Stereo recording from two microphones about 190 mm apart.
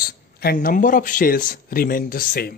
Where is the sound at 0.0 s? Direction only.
55° left (ahead or behind).